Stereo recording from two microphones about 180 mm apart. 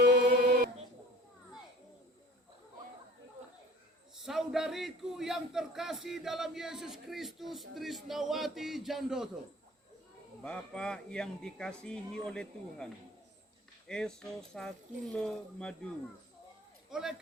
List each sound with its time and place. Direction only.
0.0 s a sound: 60° right (ahead or behind)
4.1 s a man's voice: centre (ahead or behind)
10.4 s a man's voice: 5° left (ahead or behind)
16.9 s a man's voice: centre (ahead or behind)